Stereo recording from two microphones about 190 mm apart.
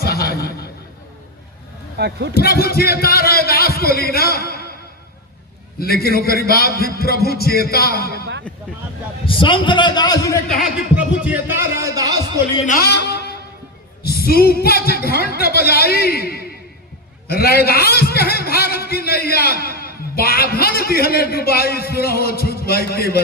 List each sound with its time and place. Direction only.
0.0 s a sound: 55° left (ahead or behind)
2.0 s speech: 60° right (ahead or behind)
2.3 s a man's voice: 55° left (ahead or behind)
5.8 s a man's voice: 55° left (ahead or behind)
9.2 s a man's voice: 25° left (ahead or behind)
10.6 s speech: 5° right (ahead or behind)
12.6 s a man's voice: 50° left (ahead or behind)